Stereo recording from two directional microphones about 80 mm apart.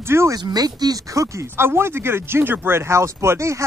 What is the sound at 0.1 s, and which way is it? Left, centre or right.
Speech, right.